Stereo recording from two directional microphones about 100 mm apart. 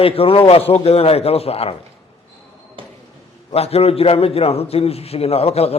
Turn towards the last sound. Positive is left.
turn(degrees=90)